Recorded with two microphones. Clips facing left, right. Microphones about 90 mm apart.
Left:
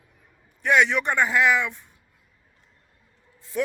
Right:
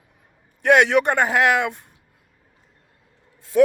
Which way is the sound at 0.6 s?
65° right (ahead or behind).